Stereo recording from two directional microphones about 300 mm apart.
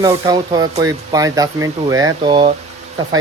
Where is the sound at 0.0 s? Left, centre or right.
Centre.